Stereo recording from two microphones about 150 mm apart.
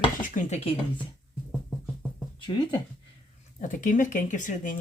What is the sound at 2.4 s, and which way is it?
Speech, 30° left (ahead or behind).